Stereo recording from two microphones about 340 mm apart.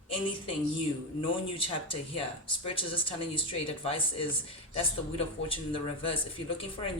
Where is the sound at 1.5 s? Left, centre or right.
Centre.